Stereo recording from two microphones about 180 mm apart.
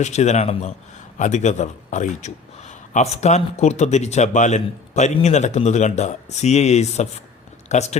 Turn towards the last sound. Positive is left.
turn(degrees=40)  # may be behind; listen again after turning